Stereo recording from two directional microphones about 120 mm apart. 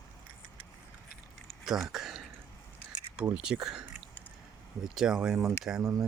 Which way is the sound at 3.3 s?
5° right (ahead or behind).